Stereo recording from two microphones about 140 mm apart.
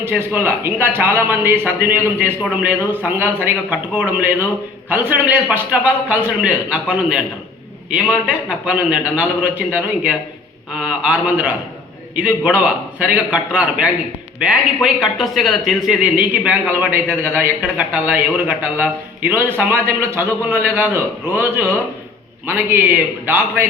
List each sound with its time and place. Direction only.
0.0 s a man's voice: 15° right (ahead or behind)